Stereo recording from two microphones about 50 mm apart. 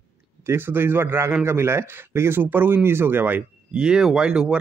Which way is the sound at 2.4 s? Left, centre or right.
Right.